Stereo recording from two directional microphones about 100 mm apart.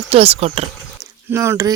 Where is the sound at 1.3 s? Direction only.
30° right (ahead or behind).